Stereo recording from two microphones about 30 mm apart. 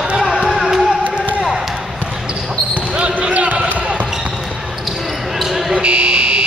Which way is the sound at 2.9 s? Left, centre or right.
Right.